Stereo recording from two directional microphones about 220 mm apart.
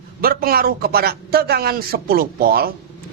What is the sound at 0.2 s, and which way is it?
Speech, 40° right (ahead or behind).